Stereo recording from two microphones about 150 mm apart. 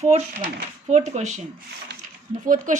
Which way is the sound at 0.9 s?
50° right (ahead or behind).